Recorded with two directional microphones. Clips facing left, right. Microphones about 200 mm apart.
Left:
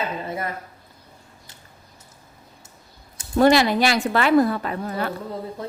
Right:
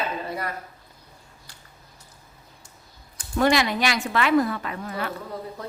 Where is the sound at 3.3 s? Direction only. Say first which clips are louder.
Left 5 dB; 35° left (ahead or behind).